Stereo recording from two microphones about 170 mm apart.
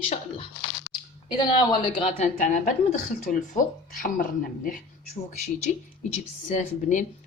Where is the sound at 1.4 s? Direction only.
30° left (ahead or behind).